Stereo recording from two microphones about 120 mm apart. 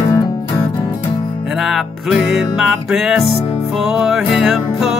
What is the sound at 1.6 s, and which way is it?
Music, centre (ahead or behind).